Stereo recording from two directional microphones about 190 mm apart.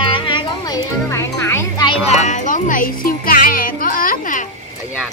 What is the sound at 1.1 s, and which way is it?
Speech, 15° left (ahead or behind).